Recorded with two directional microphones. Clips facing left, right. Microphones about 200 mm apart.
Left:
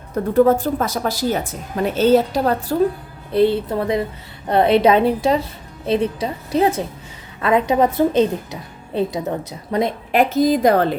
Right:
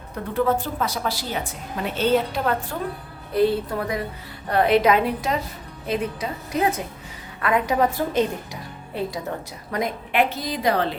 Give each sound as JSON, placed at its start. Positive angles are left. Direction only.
{"t": 0.3, "sound": "a woman's voice", "side_deg": 45}
{"t": 10.1, "sound": "a woman's voice", "side_deg": 40}